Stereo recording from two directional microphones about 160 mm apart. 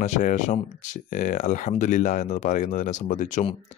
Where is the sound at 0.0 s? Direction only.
50° left (ahead or behind).